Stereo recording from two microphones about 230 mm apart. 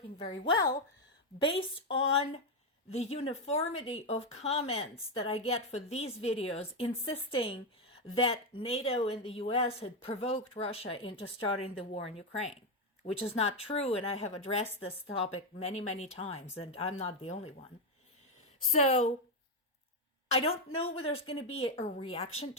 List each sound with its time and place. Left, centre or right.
0.2 s speech: left
18.8 s speech: left
20.3 s speech: left